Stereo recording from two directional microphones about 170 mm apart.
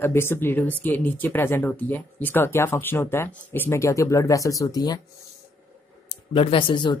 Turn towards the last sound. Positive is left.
turn(degrees=30)  # may be behind; listen again after turning